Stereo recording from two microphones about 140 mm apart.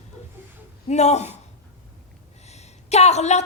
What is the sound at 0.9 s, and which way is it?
Speech, 55° left (ahead or behind).